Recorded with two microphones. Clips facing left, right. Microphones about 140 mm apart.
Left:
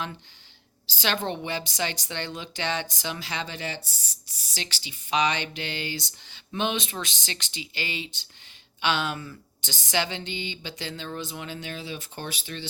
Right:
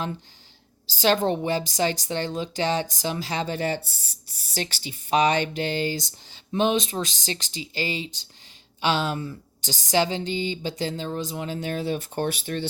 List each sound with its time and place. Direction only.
0.9 s speech: 40° right (ahead or behind)